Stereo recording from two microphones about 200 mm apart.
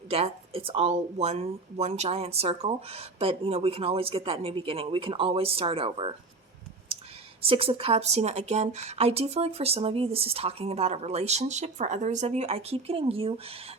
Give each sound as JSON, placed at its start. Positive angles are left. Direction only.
{"t": 0.1, "sound": "speech", "side_deg": -30}
{"t": 7.4, "sound": "speech", "side_deg": -30}